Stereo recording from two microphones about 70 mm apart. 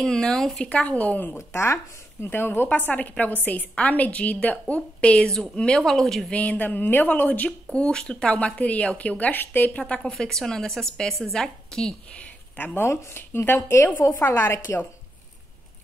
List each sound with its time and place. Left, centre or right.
0.0 s speech: centre
0.6 s a woman's voice: centre
1.5 s a woman's voice: left; by 6.3 s centre
6.3 s a woman's voice: left
7.7 s speech: centre
12.5 s speech: left